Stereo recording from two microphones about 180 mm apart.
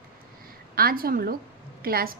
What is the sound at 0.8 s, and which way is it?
A woman's voice, 55° right (ahead or behind).